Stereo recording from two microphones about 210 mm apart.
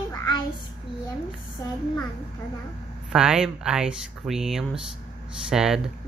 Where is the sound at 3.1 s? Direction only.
5° right (ahead or behind).